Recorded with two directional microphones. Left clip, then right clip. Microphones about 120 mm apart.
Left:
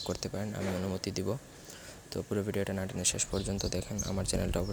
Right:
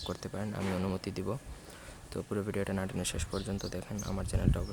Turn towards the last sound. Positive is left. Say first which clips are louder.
# left 4 dB
turn(degrees=25)  # may be behind; listen again after turning